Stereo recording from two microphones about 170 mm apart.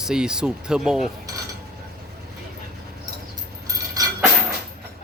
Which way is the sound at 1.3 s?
20° right (ahead or behind).